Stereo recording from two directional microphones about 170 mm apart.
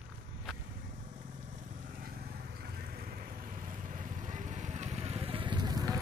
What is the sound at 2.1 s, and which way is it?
Vehicle, 65° right (ahead or behind).